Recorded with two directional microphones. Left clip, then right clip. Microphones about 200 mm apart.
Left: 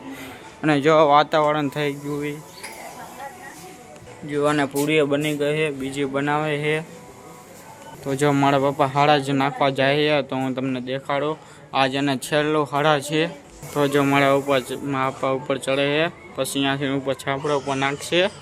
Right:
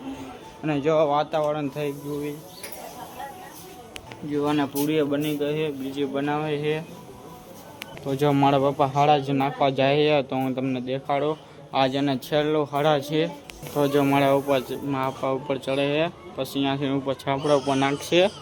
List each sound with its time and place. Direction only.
0.6 s speech: 25° left (ahead or behind)
4.3 s speech: 15° left (ahead or behind)
8.0 s a man's voice: 5° left (ahead or behind)